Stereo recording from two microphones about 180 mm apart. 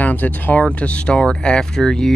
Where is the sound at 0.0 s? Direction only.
10° left (ahead or behind).